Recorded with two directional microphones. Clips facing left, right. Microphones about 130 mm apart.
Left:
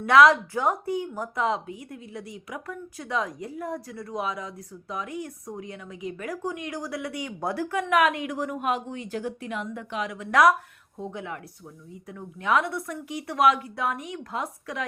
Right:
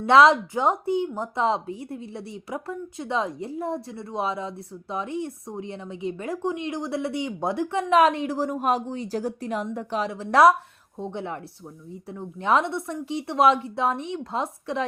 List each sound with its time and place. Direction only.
0.0 s a woman's voice: 25° right (ahead or behind)